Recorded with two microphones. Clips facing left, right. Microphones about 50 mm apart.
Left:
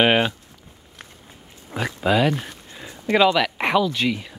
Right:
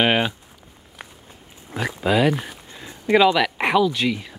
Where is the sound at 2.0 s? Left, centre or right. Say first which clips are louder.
Right 1 dB; centre.